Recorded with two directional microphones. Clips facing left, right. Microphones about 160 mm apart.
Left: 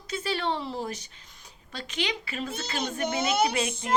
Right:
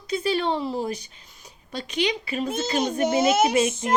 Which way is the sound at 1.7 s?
15° right (ahead or behind).